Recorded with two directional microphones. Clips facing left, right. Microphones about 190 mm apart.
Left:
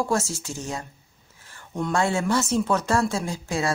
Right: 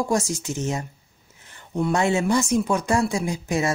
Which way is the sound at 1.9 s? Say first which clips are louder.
Right 2 dB; 20° right (ahead or behind).